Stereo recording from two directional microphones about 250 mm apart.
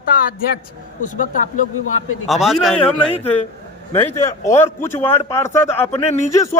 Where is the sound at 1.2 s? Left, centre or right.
Left.